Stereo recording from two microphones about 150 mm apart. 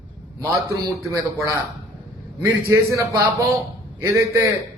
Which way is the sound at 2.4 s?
20° right (ahead or behind).